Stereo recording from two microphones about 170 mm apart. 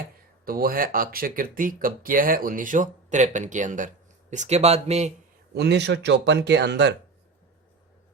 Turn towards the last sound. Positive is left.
turn(degrees=-85)